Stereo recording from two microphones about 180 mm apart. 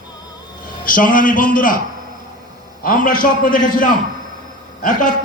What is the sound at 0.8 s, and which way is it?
Speech, 50° left (ahead or behind).